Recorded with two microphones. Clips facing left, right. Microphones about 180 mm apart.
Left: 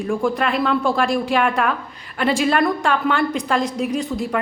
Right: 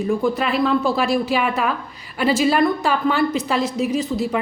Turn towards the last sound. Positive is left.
turn(degrees=0)  # may be behind; listen again after turning